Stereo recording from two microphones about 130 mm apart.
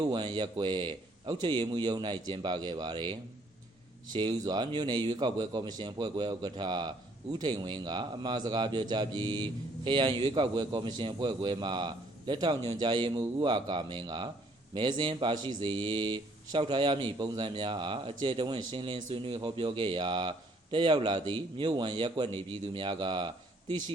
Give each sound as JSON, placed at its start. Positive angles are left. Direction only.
{"t": 0.0, "sound": "a man's voice", "side_deg": -35}